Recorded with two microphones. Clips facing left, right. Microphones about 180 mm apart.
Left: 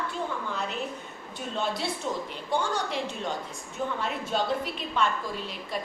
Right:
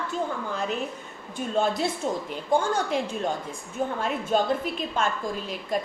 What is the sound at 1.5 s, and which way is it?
A woman's voice, 45° right (ahead or behind).